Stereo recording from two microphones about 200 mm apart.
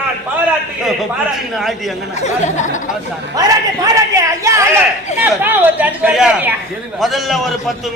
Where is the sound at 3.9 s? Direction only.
15° right (ahead or behind).